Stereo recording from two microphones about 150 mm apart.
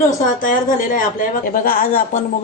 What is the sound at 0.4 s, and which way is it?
Speech, 65° left (ahead or behind).